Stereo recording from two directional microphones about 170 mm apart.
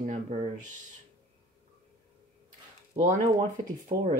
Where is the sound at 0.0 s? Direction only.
45° right (ahead or behind).